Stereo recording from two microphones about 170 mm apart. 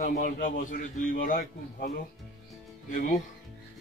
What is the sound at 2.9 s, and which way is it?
Speech, 50° left (ahead or behind).